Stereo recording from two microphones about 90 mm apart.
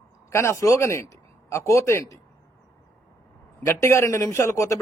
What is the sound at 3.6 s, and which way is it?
A man's voice, 30° left (ahead or behind).